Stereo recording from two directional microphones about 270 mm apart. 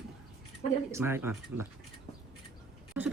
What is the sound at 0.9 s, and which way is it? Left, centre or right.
Speech, centre.